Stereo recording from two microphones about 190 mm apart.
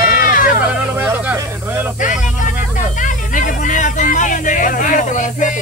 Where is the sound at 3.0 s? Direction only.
45° left (ahead or behind).